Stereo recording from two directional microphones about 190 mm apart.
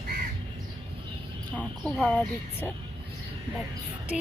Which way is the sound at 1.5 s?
Centre (ahead or behind).